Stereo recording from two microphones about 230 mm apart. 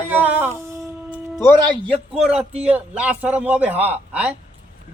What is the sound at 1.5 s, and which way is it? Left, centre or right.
Speech, centre.